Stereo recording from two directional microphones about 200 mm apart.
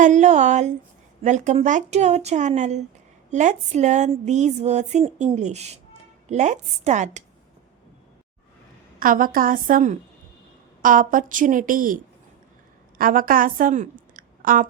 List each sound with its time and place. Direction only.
0.0 s a sound: 35° right (ahead or behind)
9.0 s a woman's voice: 45° right (ahead or behind)
13.0 s a woman's voice: 45° right (ahead or behind)